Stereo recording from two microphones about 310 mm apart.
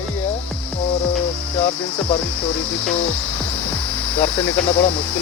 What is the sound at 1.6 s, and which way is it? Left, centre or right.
Speech, centre.